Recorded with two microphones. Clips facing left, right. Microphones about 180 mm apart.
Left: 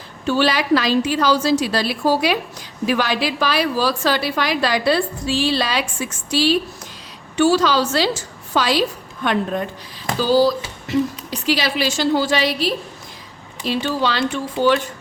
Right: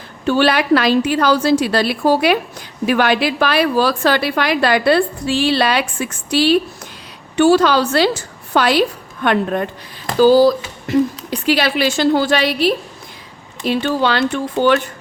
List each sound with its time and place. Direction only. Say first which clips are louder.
0.3 s a woman's voice: right 3 dB; 60° right (ahead or behind)